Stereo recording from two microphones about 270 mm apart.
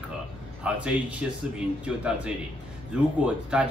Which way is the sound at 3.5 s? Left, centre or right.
Centre.